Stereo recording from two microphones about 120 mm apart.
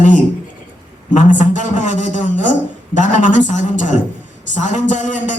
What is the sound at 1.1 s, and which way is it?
A man's voice, 90° left.